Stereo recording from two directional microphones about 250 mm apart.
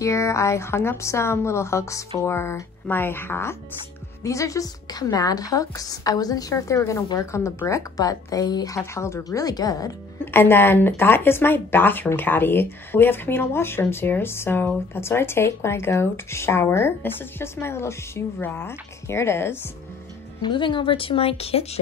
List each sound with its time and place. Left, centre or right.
0.0 s a woman's voice: centre